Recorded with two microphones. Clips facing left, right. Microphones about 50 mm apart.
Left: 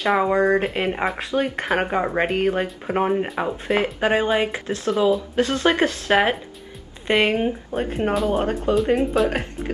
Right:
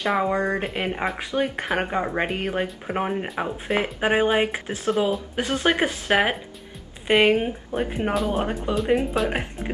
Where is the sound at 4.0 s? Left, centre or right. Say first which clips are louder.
Right 2 dB; centre.